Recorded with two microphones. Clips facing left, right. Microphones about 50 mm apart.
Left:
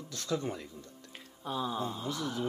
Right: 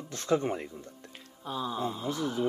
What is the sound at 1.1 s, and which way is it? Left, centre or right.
Music, centre.